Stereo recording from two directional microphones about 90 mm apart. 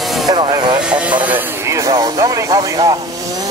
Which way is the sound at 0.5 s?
50° right (ahead or behind).